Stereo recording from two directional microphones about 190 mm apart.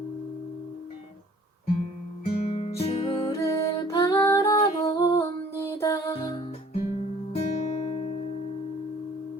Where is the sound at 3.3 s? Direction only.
15° left (ahead or behind).